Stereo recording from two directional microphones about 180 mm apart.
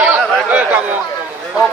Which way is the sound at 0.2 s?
10° right (ahead or behind).